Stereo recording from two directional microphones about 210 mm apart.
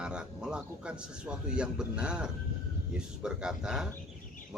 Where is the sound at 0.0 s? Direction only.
5° right (ahead or behind).